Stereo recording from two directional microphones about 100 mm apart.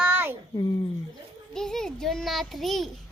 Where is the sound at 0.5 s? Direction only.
45° left (ahead or behind).